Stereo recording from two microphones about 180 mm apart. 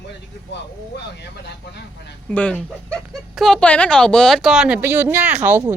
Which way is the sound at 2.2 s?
5° left (ahead or behind).